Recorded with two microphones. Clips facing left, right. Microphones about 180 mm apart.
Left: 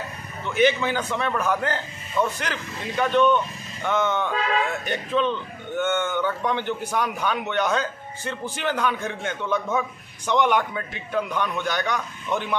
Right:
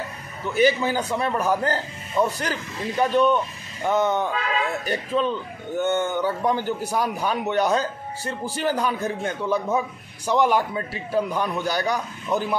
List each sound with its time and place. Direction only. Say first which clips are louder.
0.6 s a man's voice: right 1 dB; 35° right (ahead or behind)